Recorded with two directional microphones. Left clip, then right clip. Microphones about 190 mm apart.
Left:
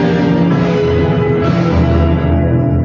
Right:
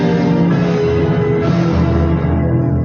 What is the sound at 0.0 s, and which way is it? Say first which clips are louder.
Music: left 2 dB; 40° left (ahead or behind).